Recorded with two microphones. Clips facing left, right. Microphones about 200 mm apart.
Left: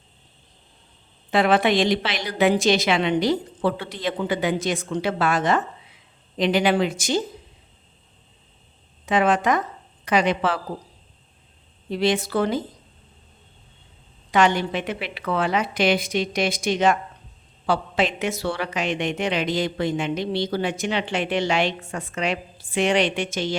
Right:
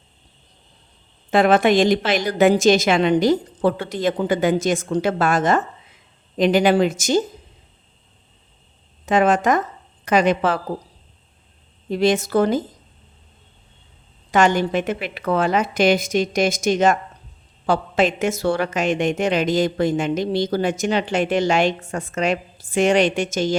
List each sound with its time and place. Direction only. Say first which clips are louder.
1.3 s a woman's voice: right 4 dB; 45° right (ahead or behind)
9.0 s a woman's voice: right 3 dB; 45° right (ahead or behind)
11.9 s a woman's voice: right 4 dB; 45° right (ahead or behind)
14.3 s a woman's voice: right 3 dB; 45° right (ahead or behind)